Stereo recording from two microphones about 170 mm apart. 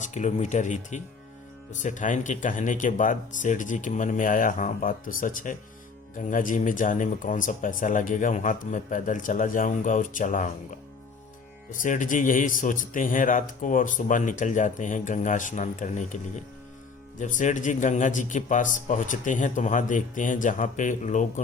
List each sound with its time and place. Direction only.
0.0 s speech: 45° left (ahead or behind)